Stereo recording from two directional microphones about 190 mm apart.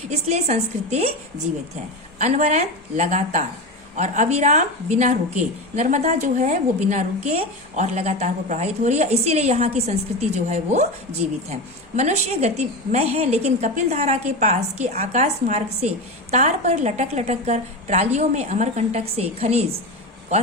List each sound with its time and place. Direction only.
0.1 s a woman's voice: 35° right (ahead or behind)
11.9 s a woman's voice: 35° right (ahead or behind)